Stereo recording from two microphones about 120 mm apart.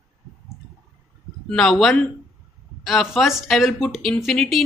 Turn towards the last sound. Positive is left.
turn(degrees=0)  # may be behind; listen again after turning